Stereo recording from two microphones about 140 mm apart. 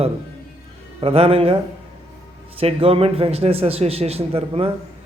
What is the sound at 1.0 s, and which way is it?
Speech, 45° right (ahead or behind).